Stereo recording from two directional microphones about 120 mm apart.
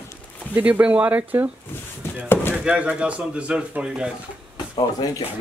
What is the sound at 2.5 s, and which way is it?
A woman's voice, 10° right (ahead or behind).